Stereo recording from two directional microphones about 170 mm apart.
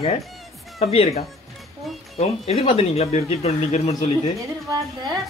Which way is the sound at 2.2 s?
35° left (ahead or behind).